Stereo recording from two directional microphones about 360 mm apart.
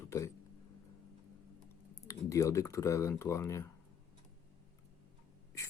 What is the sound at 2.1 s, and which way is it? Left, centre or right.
Speech, centre.